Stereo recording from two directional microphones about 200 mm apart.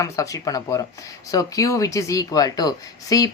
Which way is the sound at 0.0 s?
15° left (ahead or behind).